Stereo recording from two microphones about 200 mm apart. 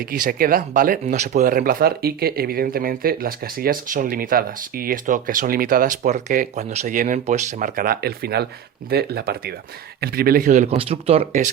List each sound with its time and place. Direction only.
0.1 s speech: 45° right (ahead or behind)